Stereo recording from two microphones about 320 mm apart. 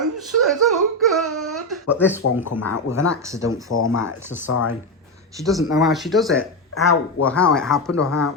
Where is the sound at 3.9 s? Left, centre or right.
Left.